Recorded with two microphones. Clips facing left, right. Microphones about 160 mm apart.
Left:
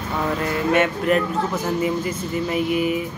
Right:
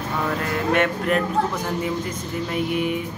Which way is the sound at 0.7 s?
5° left (ahead or behind).